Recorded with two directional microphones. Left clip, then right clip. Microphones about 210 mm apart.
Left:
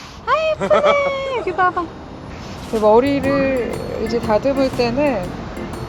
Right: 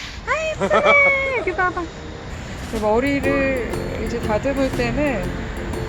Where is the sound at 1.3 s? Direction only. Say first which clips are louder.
Left 3 dB; 15° left (ahead or behind).